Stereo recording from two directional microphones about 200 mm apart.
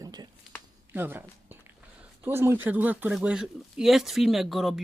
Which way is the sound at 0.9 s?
10° right (ahead or behind).